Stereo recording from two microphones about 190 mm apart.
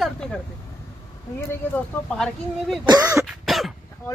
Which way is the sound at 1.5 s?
5° left (ahead or behind).